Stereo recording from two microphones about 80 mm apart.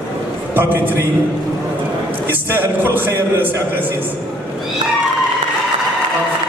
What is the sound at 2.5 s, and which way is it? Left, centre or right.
A man's voice, right.